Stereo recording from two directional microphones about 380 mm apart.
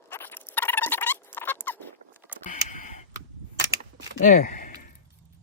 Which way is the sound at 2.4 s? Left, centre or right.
Centre.